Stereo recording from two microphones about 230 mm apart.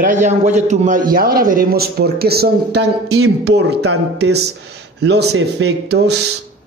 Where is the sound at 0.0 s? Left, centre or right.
Right.